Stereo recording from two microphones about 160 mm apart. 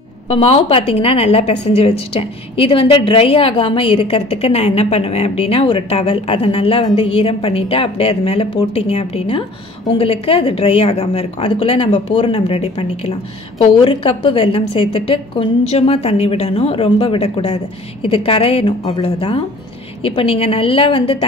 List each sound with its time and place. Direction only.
0.3 s a woman's voice: 35° left (ahead or behind)